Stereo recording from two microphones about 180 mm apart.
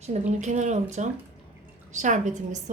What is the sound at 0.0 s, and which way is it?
A woman's voice, 40° right (ahead or behind).